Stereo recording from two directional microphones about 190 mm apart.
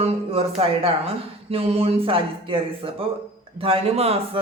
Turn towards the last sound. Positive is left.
turn(degrees=-30)  # may be behind; listen again after turning